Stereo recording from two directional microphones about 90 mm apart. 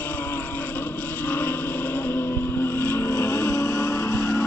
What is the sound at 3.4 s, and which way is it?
Music, 40° left (ahead or behind).